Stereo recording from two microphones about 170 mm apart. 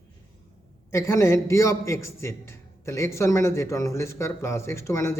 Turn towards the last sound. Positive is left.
turn(degrees=15)  # may be behind; listen again after turning